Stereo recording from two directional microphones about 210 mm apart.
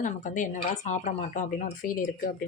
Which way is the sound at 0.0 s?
35° left (ahead or behind).